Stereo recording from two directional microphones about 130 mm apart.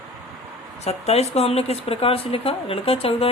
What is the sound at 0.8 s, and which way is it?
Speech, 55° left (ahead or behind).